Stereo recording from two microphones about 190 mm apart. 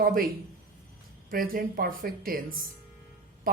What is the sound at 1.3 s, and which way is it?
Speech, 50° right (ahead or behind).